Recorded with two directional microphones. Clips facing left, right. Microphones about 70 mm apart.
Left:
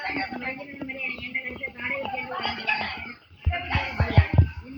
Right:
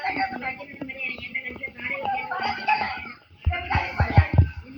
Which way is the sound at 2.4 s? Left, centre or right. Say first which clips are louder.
Right 7 dB; right.